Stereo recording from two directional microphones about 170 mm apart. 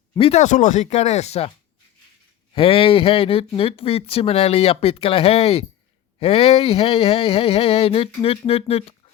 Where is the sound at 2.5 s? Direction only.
35° left (ahead or behind).